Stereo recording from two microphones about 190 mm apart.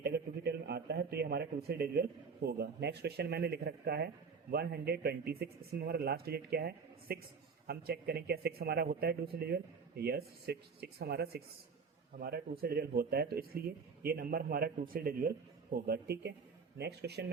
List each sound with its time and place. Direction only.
0.0 s a man's voice: 60° right (ahead or behind)